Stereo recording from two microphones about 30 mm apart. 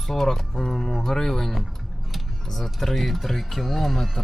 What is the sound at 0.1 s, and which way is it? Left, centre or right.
Speech, centre.